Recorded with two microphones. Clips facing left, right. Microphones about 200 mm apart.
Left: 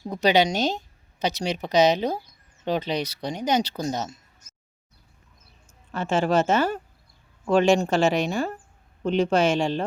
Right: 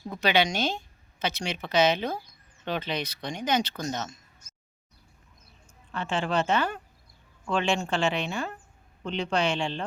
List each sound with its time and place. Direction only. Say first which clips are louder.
0.2 s speech: left 5 dB; 40° left (ahead or behind)
5.9 s speech: left 6 dB; 40° left (ahead or behind)